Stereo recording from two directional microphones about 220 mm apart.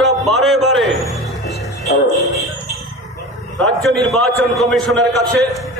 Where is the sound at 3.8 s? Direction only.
Centre (ahead or behind).